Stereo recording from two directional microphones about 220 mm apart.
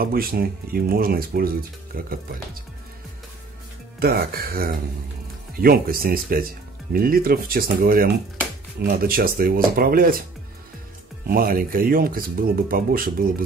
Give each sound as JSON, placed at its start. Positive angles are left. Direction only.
{"t": 0.0, "sound": "speech", "side_deg": -40}
{"t": 4.0, "sound": "speech", "side_deg": -45}
{"t": 11.2, "sound": "speech", "side_deg": -40}